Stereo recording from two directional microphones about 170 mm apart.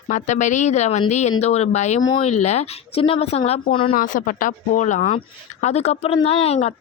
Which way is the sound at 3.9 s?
50° left (ahead or behind).